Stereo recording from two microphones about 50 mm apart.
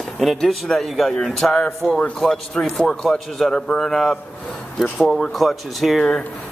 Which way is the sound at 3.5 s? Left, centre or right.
Left.